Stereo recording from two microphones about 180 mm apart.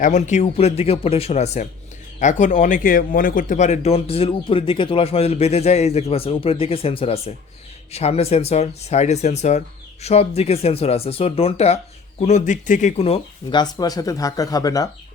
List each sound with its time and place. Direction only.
0.0 s a man's voice: 40° left (ahead or behind); by 14.8 s 20° left (ahead or behind)